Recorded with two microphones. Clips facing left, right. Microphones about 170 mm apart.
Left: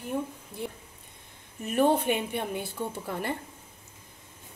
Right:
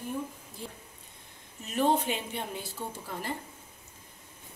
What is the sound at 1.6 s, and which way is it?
Speech, 55° left (ahead or behind).